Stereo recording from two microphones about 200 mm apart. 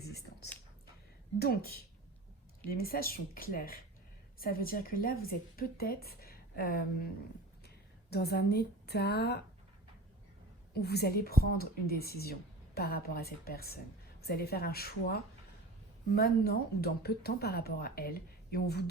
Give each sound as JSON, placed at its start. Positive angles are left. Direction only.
{"t": 0.1, "sound": "a sound", "side_deg": 55}
{"t": 1.4, "sound": "a woman's voice", "side_deg": 50}
{"t": 8.1, "sound": "a woman's voice", "side_deg": 55}
{"t": 10.8, "sound": "a woman's voice", "side_deg": 55}